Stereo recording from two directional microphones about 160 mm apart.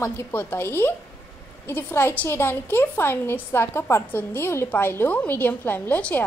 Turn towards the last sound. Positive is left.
turn(degrees=10)  # may be behind; listen again after turning